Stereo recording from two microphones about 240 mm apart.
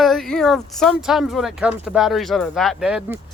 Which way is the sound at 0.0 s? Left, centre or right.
Centre.